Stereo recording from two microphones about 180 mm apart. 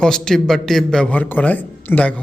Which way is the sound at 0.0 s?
5° left (ahead or behind).